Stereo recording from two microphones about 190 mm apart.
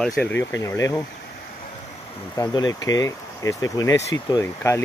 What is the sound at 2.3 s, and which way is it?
Speech, 20° left (ahead or behind).